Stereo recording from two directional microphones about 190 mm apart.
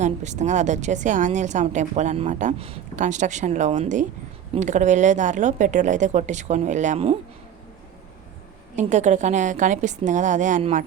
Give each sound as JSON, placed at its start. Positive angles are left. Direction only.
{"t": 0.0, "sound": "speech", "side_deg": -40}
{"t": 8.7, "sound": "speech", "side_deg": -40}